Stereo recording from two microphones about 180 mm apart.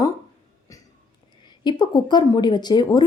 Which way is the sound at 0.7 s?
20° left (ahead or behind).